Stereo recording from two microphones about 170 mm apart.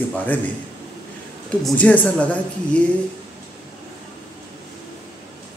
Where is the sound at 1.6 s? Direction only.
10° left (ahead or behind).